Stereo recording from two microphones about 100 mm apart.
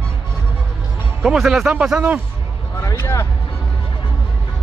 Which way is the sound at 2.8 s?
30° left (ahead or behind).